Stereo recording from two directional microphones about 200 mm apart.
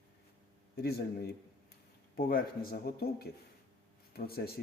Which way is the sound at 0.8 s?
50° left (ahead or behind).